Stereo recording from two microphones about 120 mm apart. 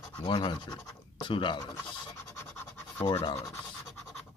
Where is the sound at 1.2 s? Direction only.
40° left (ahead or behind).